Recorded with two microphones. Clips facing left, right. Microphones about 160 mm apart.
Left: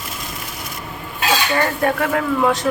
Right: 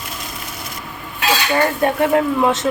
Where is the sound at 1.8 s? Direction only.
25° right (ahead or behind).